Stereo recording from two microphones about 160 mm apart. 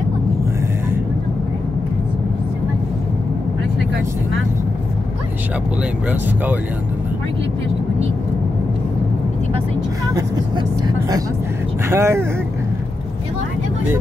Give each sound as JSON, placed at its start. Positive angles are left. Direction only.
{"t": 11.9, "sound": "speech", "side_deg": -15}